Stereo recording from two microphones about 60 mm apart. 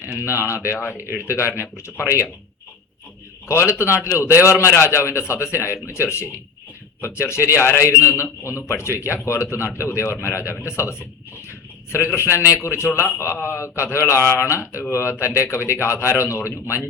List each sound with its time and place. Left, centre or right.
0.3 s a man's voice: left
3.5 s a man's voice: left
11.4 s a sound: left
12.7 s a man's voice: left